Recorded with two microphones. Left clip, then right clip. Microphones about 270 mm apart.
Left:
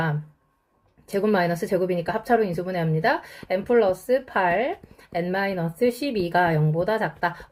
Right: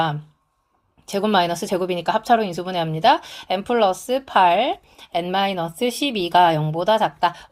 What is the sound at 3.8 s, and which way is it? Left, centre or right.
A woman's voice, right.